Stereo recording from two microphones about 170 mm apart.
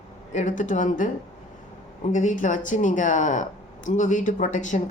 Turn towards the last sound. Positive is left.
turn(degrees=50)  # may be behind; listen again after turning